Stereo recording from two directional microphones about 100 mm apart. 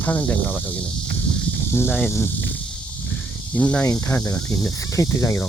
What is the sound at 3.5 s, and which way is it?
Speech, 15° left (ahead or behind).